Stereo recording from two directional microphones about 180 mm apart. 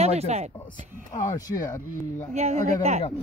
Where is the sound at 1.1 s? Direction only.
20° left (ahead or behind).